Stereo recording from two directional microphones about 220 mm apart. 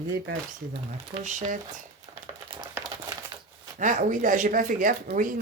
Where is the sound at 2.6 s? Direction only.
15° right (ahead or behind).